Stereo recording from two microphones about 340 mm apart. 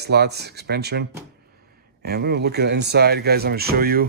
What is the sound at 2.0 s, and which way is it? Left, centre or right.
Speech, right.